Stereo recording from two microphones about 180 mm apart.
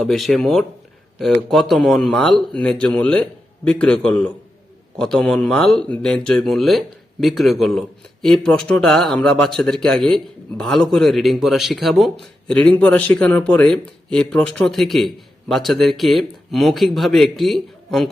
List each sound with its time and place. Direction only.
0.0 s a man's voice: centre (ahead or behind)